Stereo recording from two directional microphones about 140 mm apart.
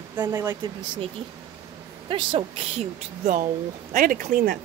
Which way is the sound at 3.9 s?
80° right.